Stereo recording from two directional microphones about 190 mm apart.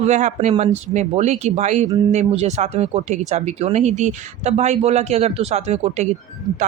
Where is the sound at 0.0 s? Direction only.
40° right (ahead or behind).